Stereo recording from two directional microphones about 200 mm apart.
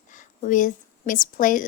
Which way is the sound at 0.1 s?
40° left (ahead or behind).